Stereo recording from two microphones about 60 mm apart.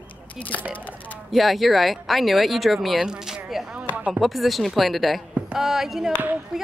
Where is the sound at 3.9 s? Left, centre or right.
Right.